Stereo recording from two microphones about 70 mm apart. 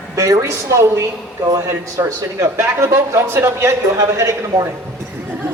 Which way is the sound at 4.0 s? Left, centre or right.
Right.